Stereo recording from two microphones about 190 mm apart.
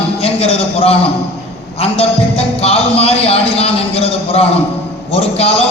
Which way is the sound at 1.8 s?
30° left (ahead or behind).